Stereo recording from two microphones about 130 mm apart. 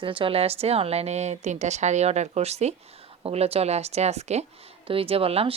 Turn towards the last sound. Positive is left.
turn(degrees=-50)  # may be behind; listen again after turning